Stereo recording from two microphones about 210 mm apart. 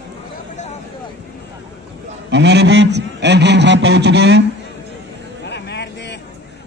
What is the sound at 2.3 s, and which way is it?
A man's voice, 55° right (ahead or behind).